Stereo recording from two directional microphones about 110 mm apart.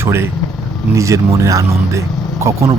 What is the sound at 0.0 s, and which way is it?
Speech, 25° right (ahead or behind).